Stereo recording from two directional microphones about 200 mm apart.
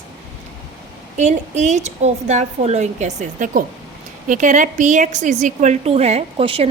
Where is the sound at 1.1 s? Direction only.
35° right (ahead or behind).